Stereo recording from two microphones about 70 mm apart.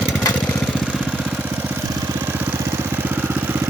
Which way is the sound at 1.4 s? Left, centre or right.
Right.